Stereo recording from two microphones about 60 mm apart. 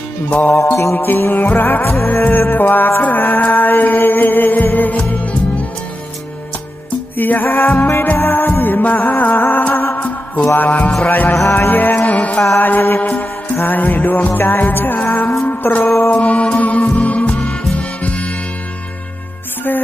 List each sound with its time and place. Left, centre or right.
0.3 s music: left
0.9 s mantra: left
7.2 s mantra: left
7.4 s music: left
11.1 s mantra: left
11.4 s music: left
11.7 s music: left
12.5 s mantra: left
13.0 s music: left